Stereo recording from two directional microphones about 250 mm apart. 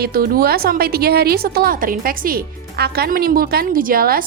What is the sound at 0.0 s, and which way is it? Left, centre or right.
A woman's voice, right.